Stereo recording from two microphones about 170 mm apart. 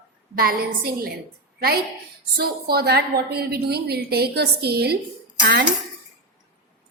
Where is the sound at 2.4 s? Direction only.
65° right (ahead or behind).